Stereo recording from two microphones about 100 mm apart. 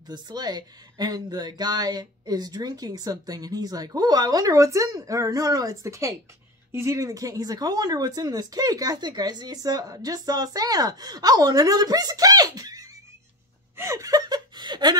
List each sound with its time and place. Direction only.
0.0 s speech: 45° right (ahead or behind)
13.7 s chuckle: 30° right (ahead or behind); by 15.0 s 45° right (ahead or behind)